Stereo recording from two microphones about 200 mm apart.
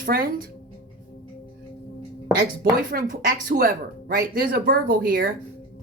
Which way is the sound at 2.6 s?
45° right (ahead or behind).